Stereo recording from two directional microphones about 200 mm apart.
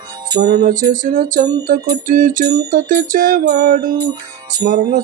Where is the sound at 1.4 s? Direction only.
20° right (ahead or behind).